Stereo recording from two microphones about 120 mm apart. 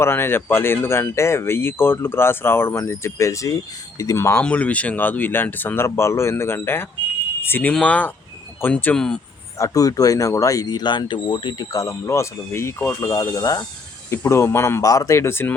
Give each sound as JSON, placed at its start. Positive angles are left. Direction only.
{"t": 0.0, "sound": "speech", "side_deg": 20}
{"t": 9.6, "sound": "speech", "side_deg": 30}
{"t": 11.6, "sound": "speech", "side_deg": 30}